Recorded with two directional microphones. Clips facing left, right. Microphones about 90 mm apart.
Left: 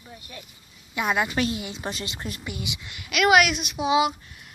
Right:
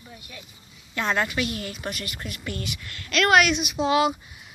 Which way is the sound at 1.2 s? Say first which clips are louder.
Left 2 dB; 30° left (ahead or behind).